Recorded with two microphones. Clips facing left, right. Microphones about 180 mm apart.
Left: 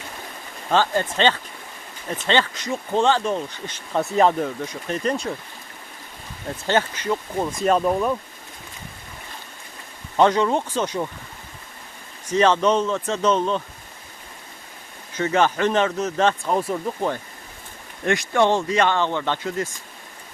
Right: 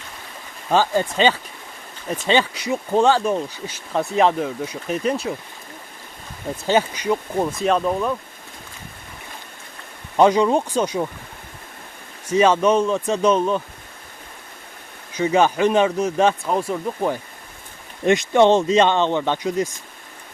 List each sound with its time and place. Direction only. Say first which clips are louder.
0.7 s speech: right 2 dB; 10° right (ahead or behind)
6.7 s speech: right 3 dB; 10° right (ahead or behind)
7.6 s speech: left 2 dB; 5° left (ahead or behind)
10.2 s speech: right 3 dB; 10° right (ahead or behind)
12.3 s speech: right 2 dB; 10° right (ahead or behind)
15.1 s speech: right 3 dB; 15° right (ahead or behind)
16.5 s speech: even; centre (ahead or behind)
18.0 s speech: right 5 dB; 20° right (ahead or behind)